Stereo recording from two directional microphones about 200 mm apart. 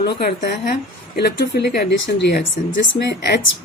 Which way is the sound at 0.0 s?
55° left (ahead or behind).